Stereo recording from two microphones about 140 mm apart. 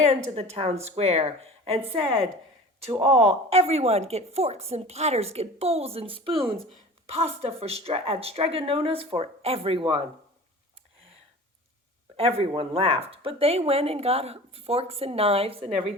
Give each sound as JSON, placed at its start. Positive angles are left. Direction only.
{"t": 0.1, "sound": "speech", "side_deg": -50}
{"t": 3.0, "sound": "speech", "side_deg": -45}
{"t": 12.1, "sound": "speech", "side_deg": -45}